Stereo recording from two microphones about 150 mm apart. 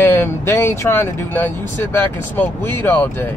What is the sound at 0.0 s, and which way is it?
Speech, 20° left (ahead or behind).